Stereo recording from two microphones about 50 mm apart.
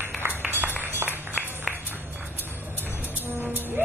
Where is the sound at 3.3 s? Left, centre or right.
Right.